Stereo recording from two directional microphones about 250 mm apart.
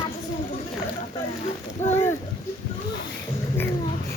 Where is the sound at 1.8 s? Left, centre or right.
Centre.